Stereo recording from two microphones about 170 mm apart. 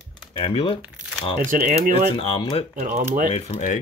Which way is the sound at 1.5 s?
50° right (ahead or behind).